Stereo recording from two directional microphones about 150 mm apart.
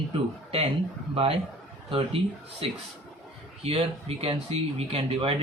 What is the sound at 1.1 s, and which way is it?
Speech, 40° right (ahead or behind).